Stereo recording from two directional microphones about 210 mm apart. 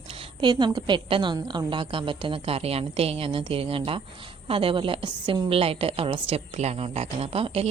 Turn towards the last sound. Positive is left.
turn(degrees=-30)  # may be behind; listen again after turning